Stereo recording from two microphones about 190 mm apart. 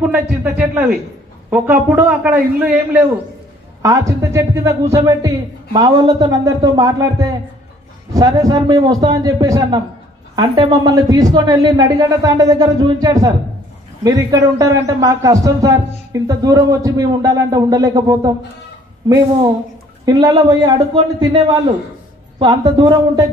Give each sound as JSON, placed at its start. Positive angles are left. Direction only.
{"t": 0.0, "sound": "a man's voice", "side_deg": -5}
{"t": 20.1, "sound": "a man's voice", "side_deg": -20}
{"t": 22.4, "sound": "a man's voice", "side_deg": -20}